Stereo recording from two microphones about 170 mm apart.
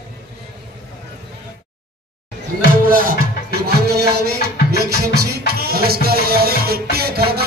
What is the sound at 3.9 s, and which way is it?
Music, 70° right (ahead or behind).